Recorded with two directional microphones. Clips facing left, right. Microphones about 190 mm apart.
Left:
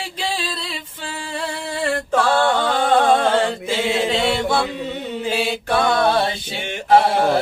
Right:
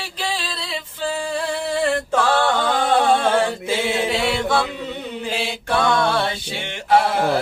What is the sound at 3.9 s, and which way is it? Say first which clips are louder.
Chant: left 2 dB; 20° left (ahead or behind).